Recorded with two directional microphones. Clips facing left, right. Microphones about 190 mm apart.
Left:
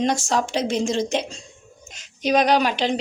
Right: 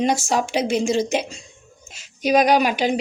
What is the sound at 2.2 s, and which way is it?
Speech, 10° right (ahead or behind).